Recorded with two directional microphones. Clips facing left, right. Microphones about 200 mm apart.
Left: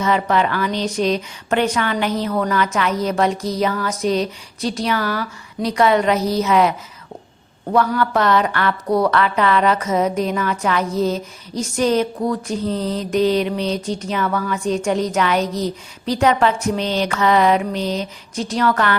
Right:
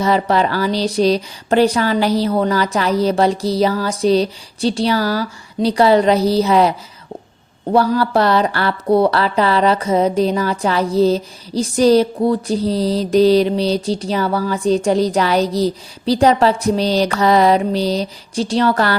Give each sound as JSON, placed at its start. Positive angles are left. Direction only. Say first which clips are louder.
{"t": 0.0, "sound": "speech", "louder": "right 3 dB", "side_deg": -35}